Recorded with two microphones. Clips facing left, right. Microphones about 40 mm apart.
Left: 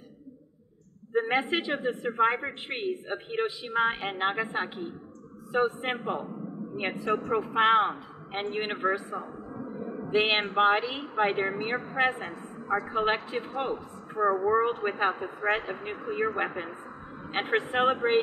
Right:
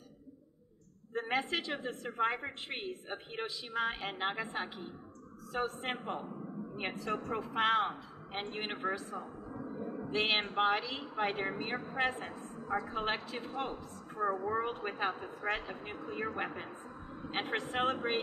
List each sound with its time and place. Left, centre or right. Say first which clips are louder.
1.1 s a woman's voice: left 8 dB; left